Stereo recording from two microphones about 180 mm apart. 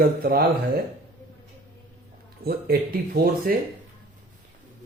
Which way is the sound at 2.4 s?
55° right (ahead or behind).